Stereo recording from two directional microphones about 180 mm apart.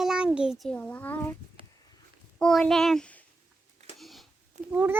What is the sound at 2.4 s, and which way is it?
Speech, centre (ahead or behind).